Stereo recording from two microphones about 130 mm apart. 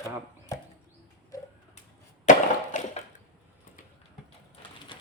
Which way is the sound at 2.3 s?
70° left (ahead or behind).